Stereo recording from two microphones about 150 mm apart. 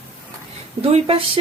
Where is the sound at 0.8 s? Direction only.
40° right (ahead or behind).